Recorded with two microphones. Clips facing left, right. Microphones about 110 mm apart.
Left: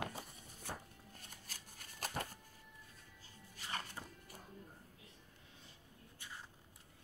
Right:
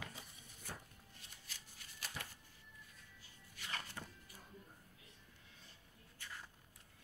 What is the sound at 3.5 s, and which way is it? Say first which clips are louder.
Music: left 2 dB; 30° left (ahead or behind).